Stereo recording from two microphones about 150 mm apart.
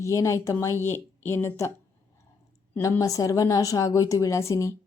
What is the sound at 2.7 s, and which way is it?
A woman's voice, 20° left (ahead or behind).